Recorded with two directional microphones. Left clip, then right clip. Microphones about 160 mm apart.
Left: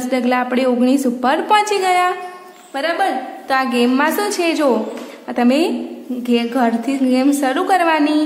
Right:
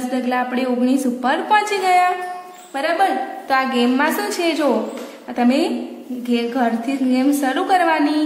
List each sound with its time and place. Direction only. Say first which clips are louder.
0.1 s a woman's voice: left 4 dB; 35° left (ahead or behind)
2.7 s a woman's voice: even; 15° left (ahead or behind); by 8.2 s 30° left (ahead or behind)